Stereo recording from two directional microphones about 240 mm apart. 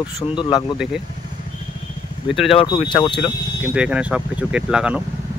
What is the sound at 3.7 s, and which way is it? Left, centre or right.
Speech, centre.